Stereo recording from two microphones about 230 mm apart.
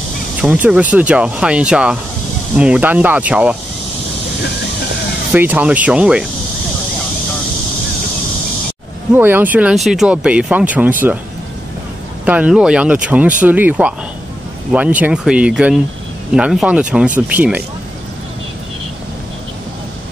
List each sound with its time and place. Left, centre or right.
0.4 s speech: centre
5.3 s speech: centre
9.1 s speech: centre
12.3 s speech: centre